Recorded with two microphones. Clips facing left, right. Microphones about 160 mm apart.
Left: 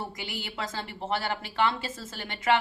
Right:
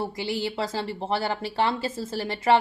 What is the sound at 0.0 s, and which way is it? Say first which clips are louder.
Speech: right 9 dB; 30° right (ahead or behind).